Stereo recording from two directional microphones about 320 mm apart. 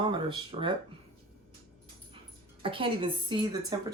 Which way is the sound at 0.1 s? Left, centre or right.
Centre.